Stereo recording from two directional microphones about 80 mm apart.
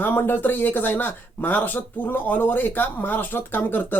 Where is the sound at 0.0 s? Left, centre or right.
Left.